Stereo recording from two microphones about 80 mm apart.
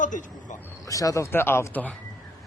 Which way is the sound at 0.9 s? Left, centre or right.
Left.